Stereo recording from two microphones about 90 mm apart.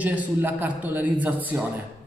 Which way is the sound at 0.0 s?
20° right (ahead or behind).